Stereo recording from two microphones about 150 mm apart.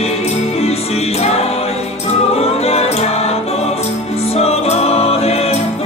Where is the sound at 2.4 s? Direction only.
45° left (ahead or behind).